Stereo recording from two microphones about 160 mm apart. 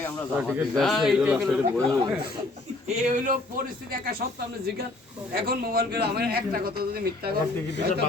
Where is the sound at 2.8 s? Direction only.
55° right (ahead or behind); by 7.4 s 75° right (ahead or behind).